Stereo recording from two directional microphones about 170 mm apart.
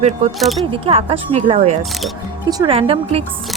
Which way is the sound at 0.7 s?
35° right (ahead or behind).